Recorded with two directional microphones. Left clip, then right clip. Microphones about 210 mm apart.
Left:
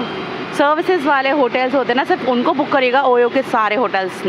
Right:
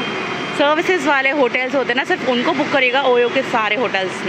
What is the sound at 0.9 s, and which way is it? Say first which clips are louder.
Speech: left 1 dB; 15° left (ahead or behind).